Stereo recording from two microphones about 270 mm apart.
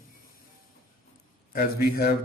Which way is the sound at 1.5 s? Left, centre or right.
Left.